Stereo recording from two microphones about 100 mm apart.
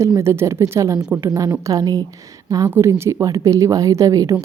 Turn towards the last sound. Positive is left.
turn(degrees=-35)  # may be behind; listen again after turning